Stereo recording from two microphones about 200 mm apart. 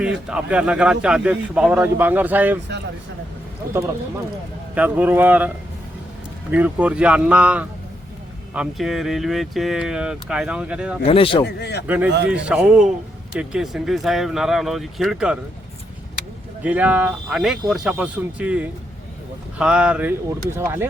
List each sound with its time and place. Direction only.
0.0 s speech: 5° right (ahead or behind)
4.7 s speech: 10° right (ahead or behind)
6.5 s speech: 5° right (ahead or behind)
11.0 s speech: 30° left (ahead or behind)
11.4 s a man's voice: 55° left (ahead or behind)
11.9 s speech: 10° right (ahead or behind)
16.6 s speech: 5° right (ahead or behind)